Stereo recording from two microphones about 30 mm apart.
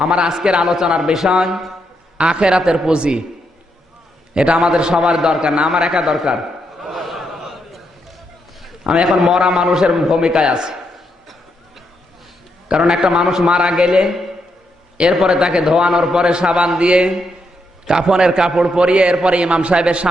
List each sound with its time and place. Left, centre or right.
0.0 s a man's voice: right
0.3 s a man's voice: right
4.5 s a man's voice: centre
6.9 s a sound: centre
8.8 s a man's voice: right
9.0 s a man's voice: centre
10.2 s a man's voice: right
12.7 s a man's voice: centre
13.3 s a man's voice: right
15.3 s a man's voice: right
17.8 s a man's voice: right
18.8 s a man's voice: right